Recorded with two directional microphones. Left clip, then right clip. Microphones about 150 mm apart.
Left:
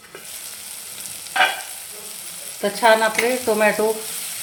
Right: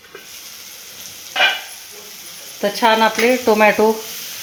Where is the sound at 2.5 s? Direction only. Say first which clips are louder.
Right 1 dB; 50° right (ahead or behind).